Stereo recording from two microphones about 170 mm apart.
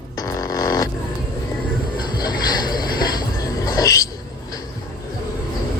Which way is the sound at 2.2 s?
25° left (ahead or behind).